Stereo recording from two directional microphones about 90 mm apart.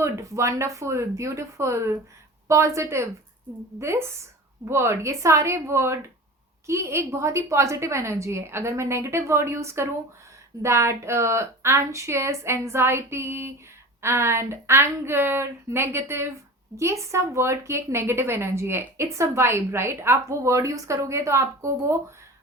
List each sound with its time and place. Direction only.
0.0 s a woman's voice: 35° right (ahead or behind)